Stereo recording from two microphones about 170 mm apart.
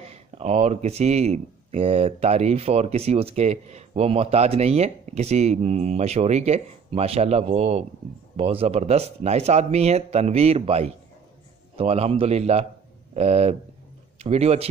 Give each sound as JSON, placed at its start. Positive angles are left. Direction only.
{"t": 0.0, "sound": "a man's voice", "side_deg": -40}